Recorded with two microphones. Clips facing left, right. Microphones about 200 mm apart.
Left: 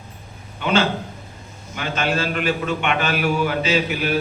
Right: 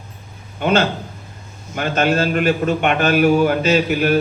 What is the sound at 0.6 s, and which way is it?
A man's voice, 45° right (ahead or behind).